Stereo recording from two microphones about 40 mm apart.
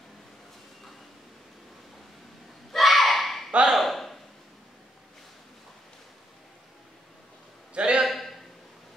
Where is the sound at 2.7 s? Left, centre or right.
Centre.